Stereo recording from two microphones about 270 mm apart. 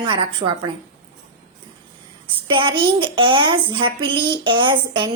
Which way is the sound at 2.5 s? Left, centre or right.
Centre.